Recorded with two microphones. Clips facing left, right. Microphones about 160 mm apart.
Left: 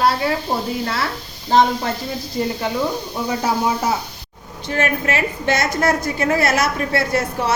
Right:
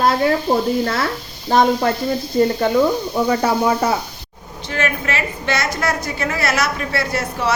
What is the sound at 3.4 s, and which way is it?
Speech, 60° right (ahead or behind).